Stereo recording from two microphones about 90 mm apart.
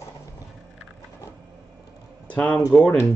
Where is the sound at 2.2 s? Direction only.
15° left (ahead or behind).